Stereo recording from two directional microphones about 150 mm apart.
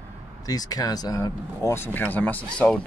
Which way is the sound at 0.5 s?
25° left (ahead or behind).